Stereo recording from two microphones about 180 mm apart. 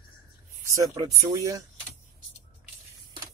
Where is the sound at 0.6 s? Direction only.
15° right (ahead or behind).